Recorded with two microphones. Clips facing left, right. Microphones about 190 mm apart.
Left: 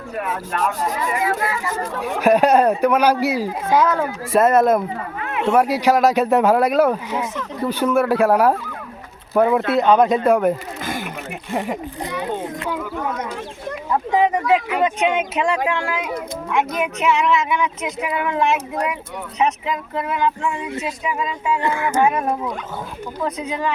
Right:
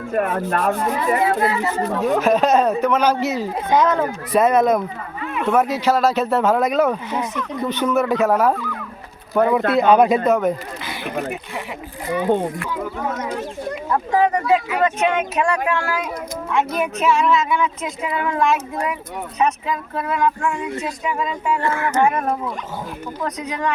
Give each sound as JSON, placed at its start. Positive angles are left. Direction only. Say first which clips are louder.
{"t": 0.1, "sound": "speech", "louder": "right 5 dB", "side_deg": -50}
{"t": 1.2, "sound": "speech", "louder": "right 4 dB", "side_deg": -30}
{"t": 2.2, "sound": "speech", "louder": "left 5 dB", "side_deg": 10}
{"t": 9.8, "sound": "speech", "louder": "right 1 dB", "side_deg": -10}
{"t": 10.2, "sound": "speech", "louder": "left 1 dB", "side_deg": 10}
{"t": 14.1, "sound": "speech", "louder": "even", "side_deg": 15}
{"t": 21.0, "sound": "speech", "louder": "right 1 dB", "side_deg": 5}
{"t": 21.6, "sound": "speech", "louder": "even", "side_deg": 15}